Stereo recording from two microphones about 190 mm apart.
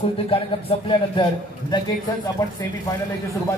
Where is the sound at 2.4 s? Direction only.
20° left (ahead or behind).